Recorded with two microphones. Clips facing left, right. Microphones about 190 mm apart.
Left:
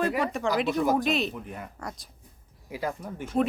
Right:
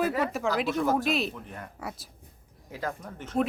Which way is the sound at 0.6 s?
Centre (ahead or behind).